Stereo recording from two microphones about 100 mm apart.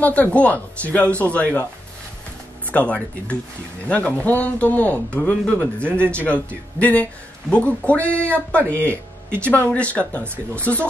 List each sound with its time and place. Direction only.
0.0 s a man's voice: 15° left (ahead or behind)
2.7 s a man's voice: 15° left (ahead or behind)
5.9 s speech: 20° right (ahead or behind)
6.8 s a man's voice: 15° left (ahead or behind)